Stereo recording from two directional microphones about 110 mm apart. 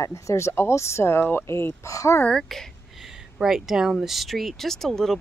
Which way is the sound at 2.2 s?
5° left (ahead or behind).